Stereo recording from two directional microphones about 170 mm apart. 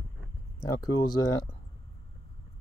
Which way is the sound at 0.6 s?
20° left (ahead or behind).